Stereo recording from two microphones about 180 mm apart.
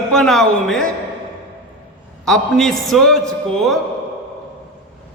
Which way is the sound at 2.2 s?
Centre (ahead or behind).